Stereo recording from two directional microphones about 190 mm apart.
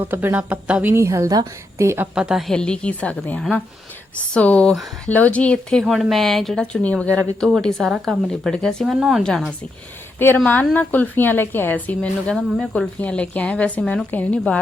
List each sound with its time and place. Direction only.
0.0 s a woman's voice: 10° right (ahead or behind)
2.1 s a woman's voice: 5° right (ahead or behind)